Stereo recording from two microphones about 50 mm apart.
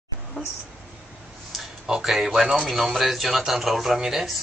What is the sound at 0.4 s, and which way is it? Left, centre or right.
Speech, left.